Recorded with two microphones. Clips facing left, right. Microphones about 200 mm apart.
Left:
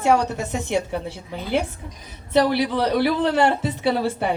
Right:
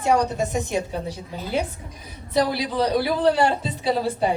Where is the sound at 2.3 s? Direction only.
70° left (ahead or behind).